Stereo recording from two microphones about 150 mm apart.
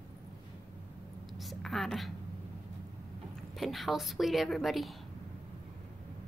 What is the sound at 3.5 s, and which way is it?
A woman's voice, centre (ahead or behind).